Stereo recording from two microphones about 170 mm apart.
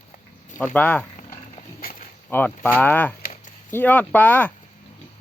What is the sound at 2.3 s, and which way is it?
Speech, 10° left (ahead or behind).